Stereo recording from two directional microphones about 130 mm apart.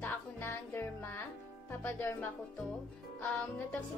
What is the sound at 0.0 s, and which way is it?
Music, 15° left (ahead or behind).